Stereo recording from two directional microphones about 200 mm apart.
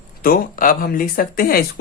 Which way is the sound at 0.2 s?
45° left (ahead or behind).